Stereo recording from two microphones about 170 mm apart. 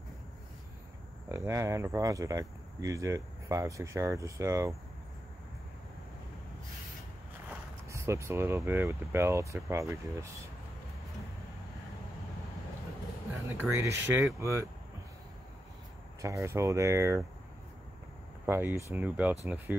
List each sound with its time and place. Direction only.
1.3 s speech: 15° right (ahead or behind)
7.9 s speech: 15° right (ahead or behind)
13.5 s speech: 15° right (ahead or behind)
16.2 s speech: 15° right (ahead or behind)
18.4 s speech: 10° right (ahead or behind)